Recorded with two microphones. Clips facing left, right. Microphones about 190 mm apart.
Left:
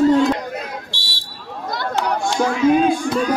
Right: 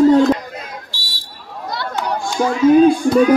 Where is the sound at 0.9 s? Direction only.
70° left (ahead or behind).